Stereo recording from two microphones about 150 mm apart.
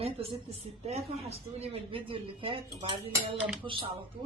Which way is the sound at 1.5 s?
40° right (ahead or behind).